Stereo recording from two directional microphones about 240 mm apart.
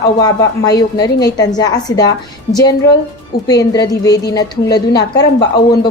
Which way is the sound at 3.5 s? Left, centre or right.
Centre.